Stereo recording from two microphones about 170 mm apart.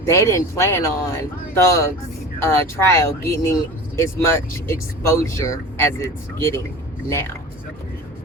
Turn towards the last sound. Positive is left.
turn(degrees=15)  # may be behind; listen again after turning